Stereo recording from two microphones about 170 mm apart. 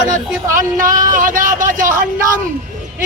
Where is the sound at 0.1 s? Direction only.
50° right (ahead or behind).